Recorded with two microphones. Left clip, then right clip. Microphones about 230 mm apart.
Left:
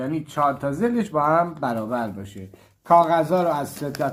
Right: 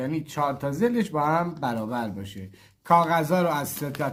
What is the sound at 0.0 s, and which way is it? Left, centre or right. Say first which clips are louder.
Speech: left 5 dB; right.